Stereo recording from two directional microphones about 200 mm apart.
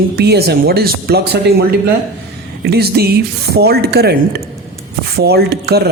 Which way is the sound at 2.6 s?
50° right (ahead or behind).